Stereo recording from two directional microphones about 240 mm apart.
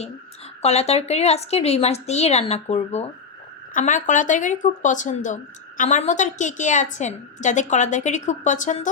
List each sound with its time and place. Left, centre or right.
0.6 s speech: left